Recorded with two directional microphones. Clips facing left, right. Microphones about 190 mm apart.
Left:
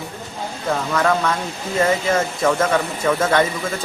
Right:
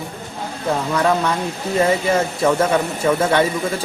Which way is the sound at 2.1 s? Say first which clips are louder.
Right 1 dB; 10° right (ahead or behind).